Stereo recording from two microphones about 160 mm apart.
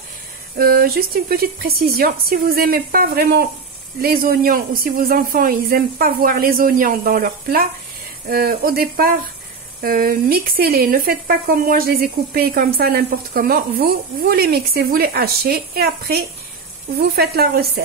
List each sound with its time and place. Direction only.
0.6 s speech: 70° right (ahead or behind)
4.0 s speech: 65° right (ahead or behind)